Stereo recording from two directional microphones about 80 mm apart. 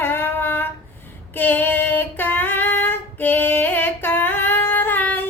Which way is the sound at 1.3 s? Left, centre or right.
Left.